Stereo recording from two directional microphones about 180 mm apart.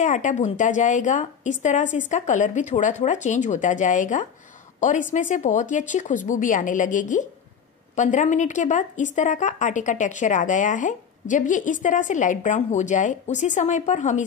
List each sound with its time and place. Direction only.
0.0 s a woman's voice: 45° left (ahead or behind)